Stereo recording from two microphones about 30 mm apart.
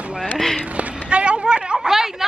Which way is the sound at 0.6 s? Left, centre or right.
Right.